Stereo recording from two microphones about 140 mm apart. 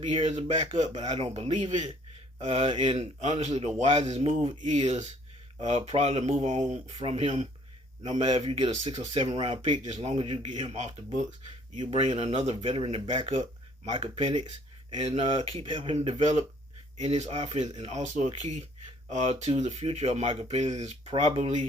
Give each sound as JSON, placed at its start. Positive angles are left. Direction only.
{"t": 0.1, "sound": "speech", "side_deg": -55}
{"t": 2.8, "sound": "speech", "side_deg": -40}
{"t": 3.2, "sound": "speech", "side_deg": -55}
{"t": 9.9, "sound": "speech", "side_deg": -50}
{"t": 17.0, "sound": "speech", "side_deg": -50}